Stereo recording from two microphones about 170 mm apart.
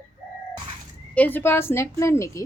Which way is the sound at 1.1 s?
10° left (ahead or behind).